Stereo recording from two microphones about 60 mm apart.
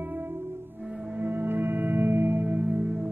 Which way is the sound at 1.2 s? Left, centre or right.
Right.